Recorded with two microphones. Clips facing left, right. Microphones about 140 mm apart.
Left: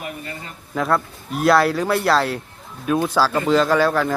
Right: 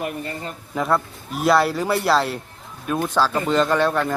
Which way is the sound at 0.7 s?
Centre (ahead or behind).